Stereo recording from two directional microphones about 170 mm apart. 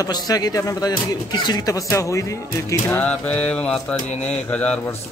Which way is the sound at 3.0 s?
5° left (ahead or behind).